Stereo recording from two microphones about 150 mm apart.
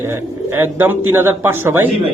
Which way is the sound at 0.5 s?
15° right (ahead or behind).